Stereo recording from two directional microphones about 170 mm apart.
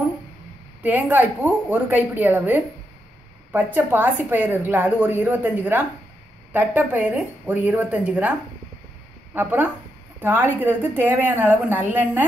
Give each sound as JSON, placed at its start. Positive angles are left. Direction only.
{"t": 0.8, "sound": "a woman's voice", "side_deg": -10}